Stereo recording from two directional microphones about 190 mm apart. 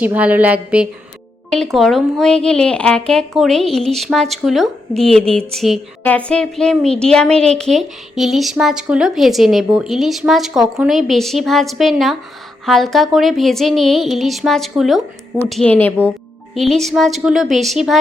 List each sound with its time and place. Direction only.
0.0 s a woman's voice: 10° right (ahead or behind)